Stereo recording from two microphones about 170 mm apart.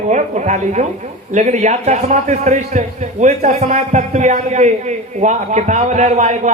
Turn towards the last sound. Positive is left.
turn(degrees=-45)  # may be behind; listen again after turning